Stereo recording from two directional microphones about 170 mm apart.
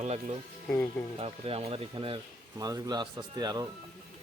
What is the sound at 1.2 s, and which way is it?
Speech, 35° right (ahead or behind).